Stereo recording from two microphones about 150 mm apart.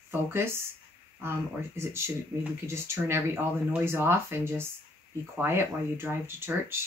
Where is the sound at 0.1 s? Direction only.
15° right (ahead or behind).